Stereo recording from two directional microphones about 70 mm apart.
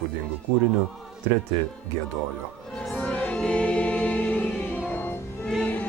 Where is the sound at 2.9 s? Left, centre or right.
Centre.